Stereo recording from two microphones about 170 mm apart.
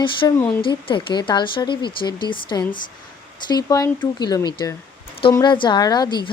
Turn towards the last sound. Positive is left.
turn(degrees=25)  # may be behind; listen again after turning